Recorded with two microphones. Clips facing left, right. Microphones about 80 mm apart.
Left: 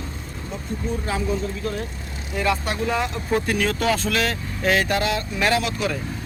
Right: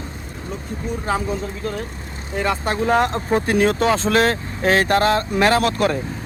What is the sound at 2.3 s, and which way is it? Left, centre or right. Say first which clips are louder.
Speech: right 2 dB; right.